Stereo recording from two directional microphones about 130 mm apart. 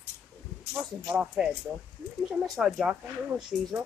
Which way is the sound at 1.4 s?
5° right (ahead or behind).